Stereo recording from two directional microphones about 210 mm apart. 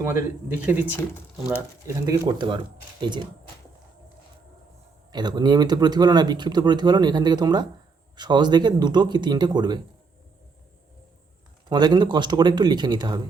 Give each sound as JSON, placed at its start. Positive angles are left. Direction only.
{"t": 0.0, "sound": "speech", "side_deg": -15}
{"t": 1.9, "sound": "speech", "side_deg": -20}
{"t": 5.1, "sound": "speech", "side_deg": -20}
{"t": 11.7, "sound": "speech", "side_deg": -20}